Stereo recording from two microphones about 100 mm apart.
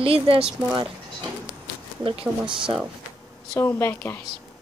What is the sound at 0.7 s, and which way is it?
Speech, 45° right (ahead or behind).